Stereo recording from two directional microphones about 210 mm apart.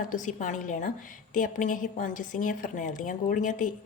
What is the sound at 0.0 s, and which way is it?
A woman's voice, 40° left (ahead or behind).